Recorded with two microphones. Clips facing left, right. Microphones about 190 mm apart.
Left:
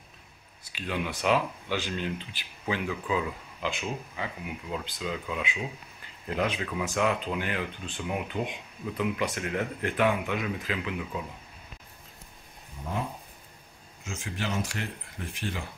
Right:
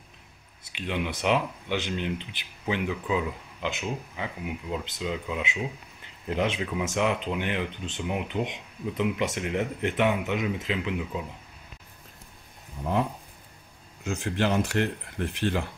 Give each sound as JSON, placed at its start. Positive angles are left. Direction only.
{"t": 0.7, "sound": "speech", "side_deg": -20}
{"t": 14.0, "sound": "speech", "side_deg": -60}